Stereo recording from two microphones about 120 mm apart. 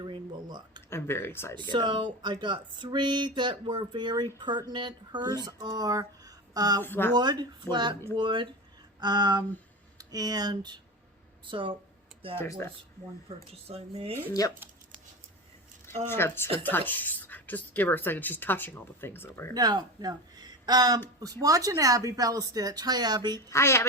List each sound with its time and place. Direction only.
0.0 s a sound: 40° right (ahead or behind)
0.9 s speech: 20° left (ahead or behind)
1.5 s speech: 40° right (ahead or behind)
6.8 s speech: 15° left (ahead or behind)
7.1 s speech: 35° right (ahead or behind)
9.0 s a sound: 35° right (ahead or behind)
10.0 s speech: 30° right (ahead or behind)
12.4 s speech: 25° left (ahead or behind)
13.2 s speech: 55° right (ahead or behind)
14.4 s speech: 30° left (ahead or behind)
16.0 s speech: 20° left (ahead or behind)
19.5 s speech: 35° right (ahead or behind)
23.5 s speech: 25° left (ahead or behind)